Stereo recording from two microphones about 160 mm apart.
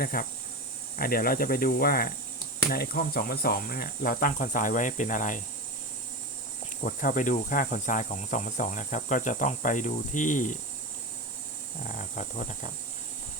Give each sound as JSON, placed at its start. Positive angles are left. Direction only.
{"t": 0.0, "sound": "speech", "side_deg": 65}
{"t": 6.8, "sound": "insect", "side_deg": 60}
{"t": 11.9, "sound": "speech", "side_deg": 55}